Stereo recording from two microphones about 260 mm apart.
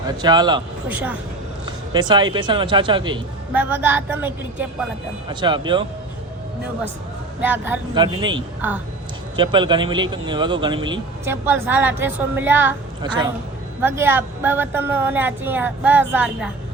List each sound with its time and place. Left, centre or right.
0.2 s a man's voice: centre
0.9 s a woman's voice: centre
1.6 s a man's voice: centre
3.5 s a man's voice: centre
5.3 s a man's voice: centre
7.4 s a man's voice: centre
9.3 s a man's voice: centre